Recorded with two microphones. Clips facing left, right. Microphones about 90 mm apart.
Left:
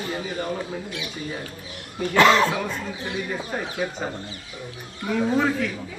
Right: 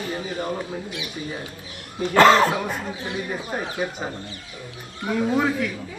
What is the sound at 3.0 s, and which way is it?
Speech, 15° right (ahead or behind).